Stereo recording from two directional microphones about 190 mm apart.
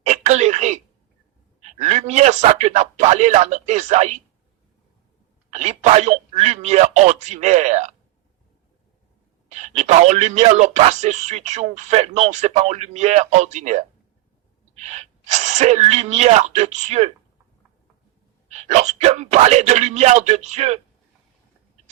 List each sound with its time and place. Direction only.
0.0 s a sound: 35° right (ahead or behind)
1.6 s speech: 35° right (ahead or behind)
5.5 s speech: 35° right (ahead or behind)
9.5 s speech: 35° right (ahead or behind)
18.5 s speech: 35° right (ahead or behind)